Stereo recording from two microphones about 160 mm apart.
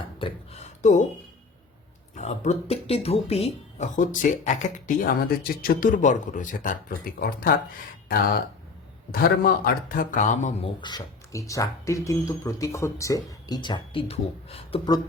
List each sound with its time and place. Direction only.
0.2 s speech: 30° left (ahead or behind)
0.6 s speech: 50° left (ahead or behind)
2.1 s speech: 45° left (ahead or behind); by 5.9 s 65° left (ahead or behind)
6.0 s speech: 50° left (ahead or behind)
10.8 s speech: 25° left (ahead or behind)